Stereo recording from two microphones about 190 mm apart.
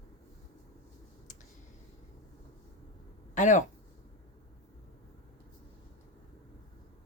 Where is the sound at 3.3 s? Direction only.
40° left (ahead or behind).